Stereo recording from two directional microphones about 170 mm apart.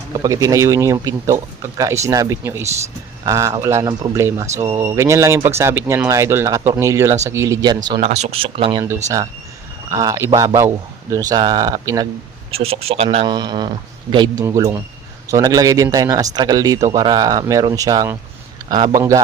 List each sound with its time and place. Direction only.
0.1 s speech: 20° right (ahead or behind)
7.9 s speech: 40° right (ahead or behind)
9.9 s speech: 20° right (ahead or behind)
12.5 s speech: 35° right (ahead or behind)